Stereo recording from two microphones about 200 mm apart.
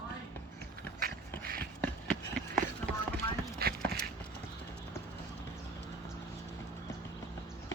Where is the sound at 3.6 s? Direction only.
50° right (ahead or behind).